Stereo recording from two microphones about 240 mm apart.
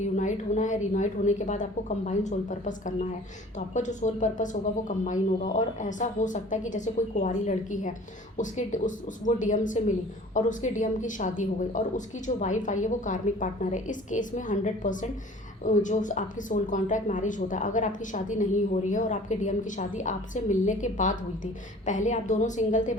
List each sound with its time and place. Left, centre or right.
0.0 s speech: left